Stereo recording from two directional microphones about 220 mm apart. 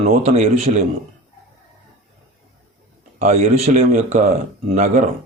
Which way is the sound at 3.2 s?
30° right (ahead or behind).